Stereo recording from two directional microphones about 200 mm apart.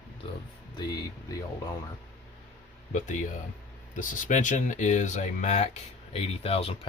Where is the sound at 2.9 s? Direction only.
40° left (ahead or behind).